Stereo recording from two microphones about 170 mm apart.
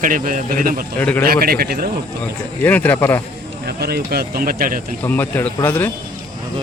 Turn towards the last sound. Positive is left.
turn(degrees=10)  # may be behind; listen again after turning